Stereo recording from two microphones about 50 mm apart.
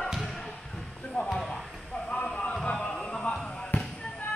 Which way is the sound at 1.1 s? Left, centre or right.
Centre.